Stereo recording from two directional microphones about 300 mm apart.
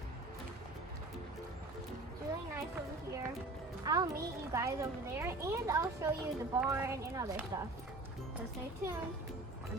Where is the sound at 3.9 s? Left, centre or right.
Centre.